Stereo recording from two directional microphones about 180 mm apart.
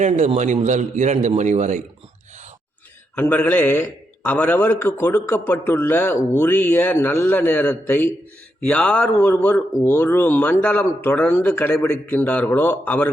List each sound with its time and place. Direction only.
0.0 s a man's voice: 40° right (ahead or behind)
3.2 s a man's voice: 10° left (ahead or behind)